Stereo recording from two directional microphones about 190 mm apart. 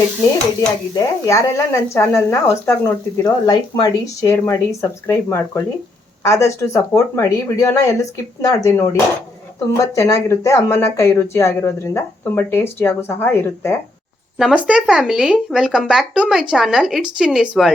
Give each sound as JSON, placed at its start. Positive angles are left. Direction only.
{"t": 0.9, "sound": "speech", "side_deg": 15}
{"t": 14.3, "sound": "speech", "side_deg": -5}